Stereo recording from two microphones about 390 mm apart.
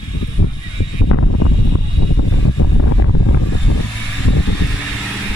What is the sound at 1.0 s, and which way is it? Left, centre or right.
Vehicle, left.